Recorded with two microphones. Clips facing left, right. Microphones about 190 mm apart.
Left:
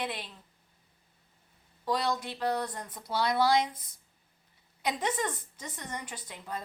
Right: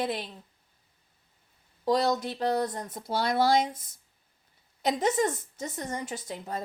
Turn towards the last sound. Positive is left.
turn(degrees=-45)  # may be behind; listen again after turning